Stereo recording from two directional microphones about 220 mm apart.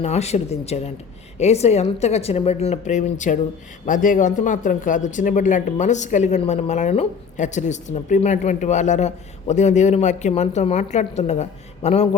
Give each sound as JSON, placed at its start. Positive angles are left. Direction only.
{"t": 0.0, "sound": "a woman's voice", "side_deg": 30}